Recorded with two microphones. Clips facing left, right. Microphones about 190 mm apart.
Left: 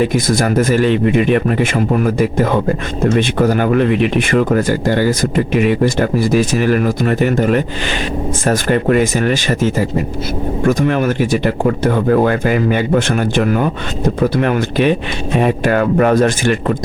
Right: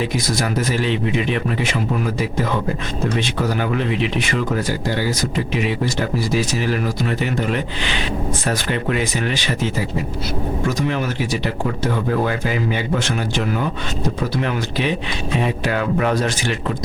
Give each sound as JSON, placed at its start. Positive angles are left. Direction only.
{"t": 0.0, "sound": "speech", "side_deg": 50}